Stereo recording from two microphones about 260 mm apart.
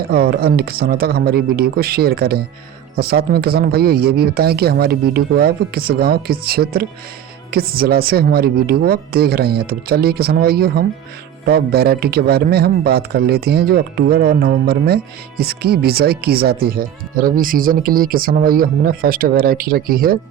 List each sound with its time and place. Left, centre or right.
0.1 s speech: right